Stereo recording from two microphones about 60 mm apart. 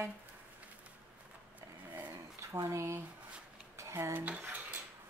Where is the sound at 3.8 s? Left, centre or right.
Right.